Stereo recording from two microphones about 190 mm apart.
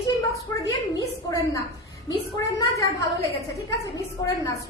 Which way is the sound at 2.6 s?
15° left (ahead or behind).